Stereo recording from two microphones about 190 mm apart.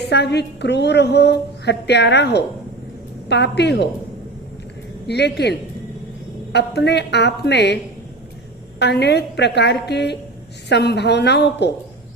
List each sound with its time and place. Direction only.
0.1 s a woman's voice: 60° left (ahead or behind)
5.0 s a woman's voice: 60° left (ahead or behind)
8.8 s a woman's voice: 60° left (ahead or behind)